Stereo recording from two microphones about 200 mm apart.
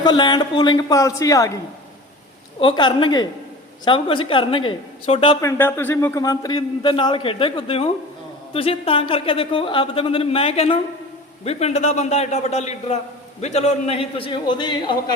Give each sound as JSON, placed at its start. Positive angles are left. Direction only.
{"t": 0.0, "sound": "a man's voice", "side_deg": 20}
{"t": 2.6, "sound": "a man's voice", "side_deg": 25}
{"t": 5.5, "sound": "a man's voice", "side_deg": 10}